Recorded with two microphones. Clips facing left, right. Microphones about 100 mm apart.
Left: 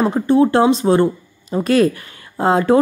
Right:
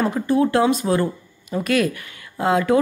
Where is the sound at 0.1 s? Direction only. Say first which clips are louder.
Left 5 dB; 30° left (ahead or behind).